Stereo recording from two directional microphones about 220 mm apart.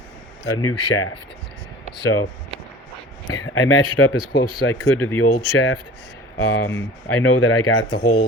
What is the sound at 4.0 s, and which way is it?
Speech, 65° left (ahead or behind).